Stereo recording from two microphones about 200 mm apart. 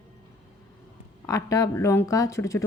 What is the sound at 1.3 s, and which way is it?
A woman's voice, 15° left (ahead or behind).